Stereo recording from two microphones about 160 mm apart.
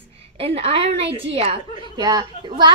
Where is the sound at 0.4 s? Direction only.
40° right (ahead or behind).